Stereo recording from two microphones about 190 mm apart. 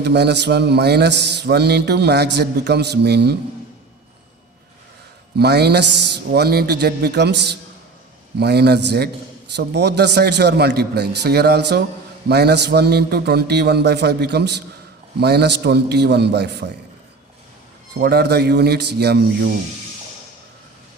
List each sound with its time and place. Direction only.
0.0 s mantra: 60° right (ahead or behind)
5.4 s mantra: 60° right (ahead or behind)
18.0 s mantra: 60° right (ahead or behind)